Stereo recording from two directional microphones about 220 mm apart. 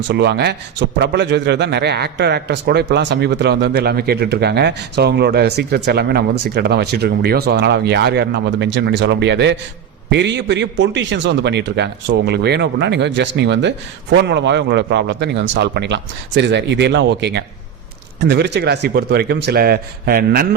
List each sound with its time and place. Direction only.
0.1 s a man's voice: 50° right (ahead or behind)